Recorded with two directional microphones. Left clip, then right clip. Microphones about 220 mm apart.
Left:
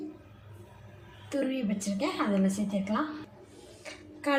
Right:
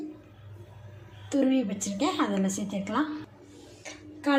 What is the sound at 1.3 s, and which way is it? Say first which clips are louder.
Speech: right 5 dB; 20° right (ahead or behind).